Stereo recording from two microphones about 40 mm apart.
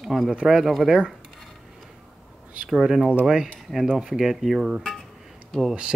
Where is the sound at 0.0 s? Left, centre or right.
Centre.